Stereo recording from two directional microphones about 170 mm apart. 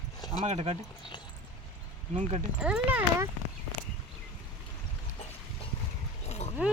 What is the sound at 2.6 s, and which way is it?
Speech, 10° right (ahead or behind).